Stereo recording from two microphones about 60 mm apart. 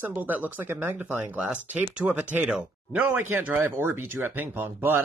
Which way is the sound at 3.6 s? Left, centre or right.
Right.